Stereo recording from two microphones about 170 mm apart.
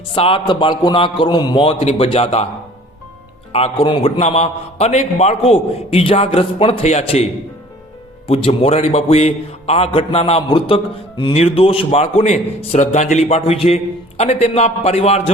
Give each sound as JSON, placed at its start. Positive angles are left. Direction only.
{"t": 0.1, "sound": "a man's voice", "side_deg": 30}
{"t": 3.5, "sound": "a man's voice", "side_deg": 30}
{"t": 8.3, "sound": "a man's voice", "side_deg": 35}